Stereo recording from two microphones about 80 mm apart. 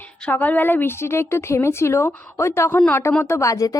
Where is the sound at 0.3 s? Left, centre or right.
Left.